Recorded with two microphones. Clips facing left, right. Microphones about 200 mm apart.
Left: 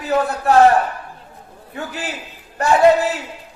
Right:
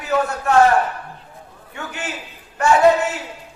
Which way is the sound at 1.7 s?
35° left (ahead or behind).